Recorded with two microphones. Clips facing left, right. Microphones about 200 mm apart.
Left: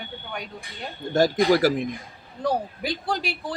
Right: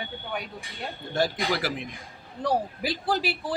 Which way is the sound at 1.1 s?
45° left (ahead or behind).